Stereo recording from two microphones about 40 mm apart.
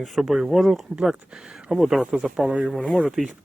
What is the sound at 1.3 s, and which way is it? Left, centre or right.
Speech, right.